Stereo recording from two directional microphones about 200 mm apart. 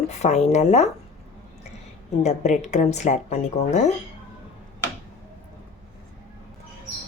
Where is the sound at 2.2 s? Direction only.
35° left (ahead or behind).